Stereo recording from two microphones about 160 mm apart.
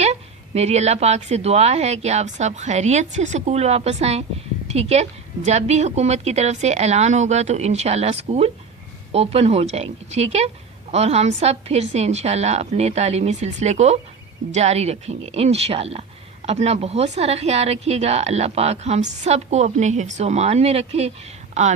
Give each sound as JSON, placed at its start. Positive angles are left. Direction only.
{"t": 0.0, "sound": "a woman's voice", "side_deg": -40}